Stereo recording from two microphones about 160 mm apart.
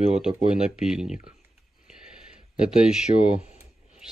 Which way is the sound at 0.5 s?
5° right (ahead or behind).